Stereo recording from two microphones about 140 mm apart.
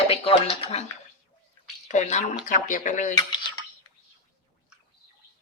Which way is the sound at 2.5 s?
70° left (ahead or behind).